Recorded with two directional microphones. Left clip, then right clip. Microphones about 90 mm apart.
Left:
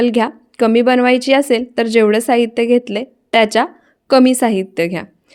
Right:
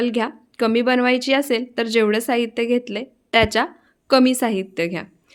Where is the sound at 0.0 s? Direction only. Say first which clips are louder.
Left 7 dB; 40° left (ahead or behind).